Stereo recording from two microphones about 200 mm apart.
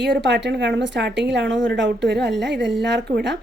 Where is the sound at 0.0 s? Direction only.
60° right (ahead or behind).